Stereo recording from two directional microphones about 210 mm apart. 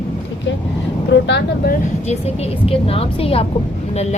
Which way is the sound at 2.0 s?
30° left (ahead or behind).